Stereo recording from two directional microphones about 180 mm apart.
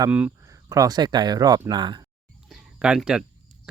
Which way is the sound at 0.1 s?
5° right (ahead or behind).